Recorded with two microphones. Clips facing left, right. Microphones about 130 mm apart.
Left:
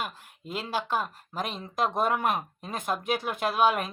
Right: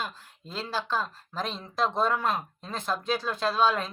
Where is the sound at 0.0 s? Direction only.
15° left (ahead or behind).